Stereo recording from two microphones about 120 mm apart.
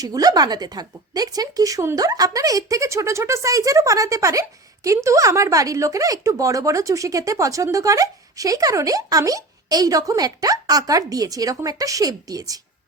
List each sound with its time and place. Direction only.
0.0 s a woman's voice: 30° right (ahead or behind)